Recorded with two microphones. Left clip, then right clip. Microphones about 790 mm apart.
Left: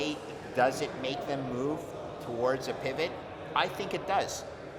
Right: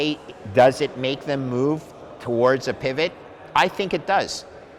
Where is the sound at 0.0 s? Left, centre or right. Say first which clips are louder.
Right 9 dB; right.